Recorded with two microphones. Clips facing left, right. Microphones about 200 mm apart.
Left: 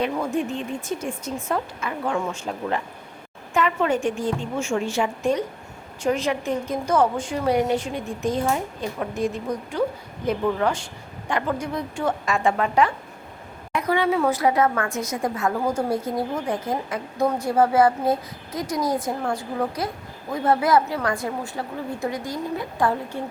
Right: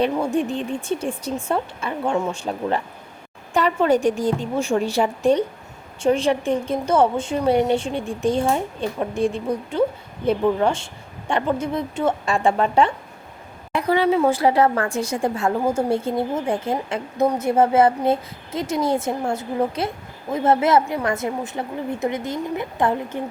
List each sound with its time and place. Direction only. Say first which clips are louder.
0.3 s a woman's voice: right 3 dB; 30° right (ahead or behind)